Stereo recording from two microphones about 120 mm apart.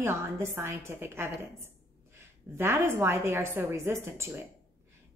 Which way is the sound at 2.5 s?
20° right (ahead or behind).